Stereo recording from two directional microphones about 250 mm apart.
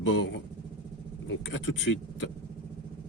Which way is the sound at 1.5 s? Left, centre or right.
Left.